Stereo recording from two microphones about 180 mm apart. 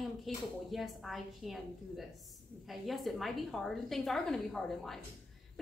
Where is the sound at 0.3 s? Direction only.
Centre (ahead or behind).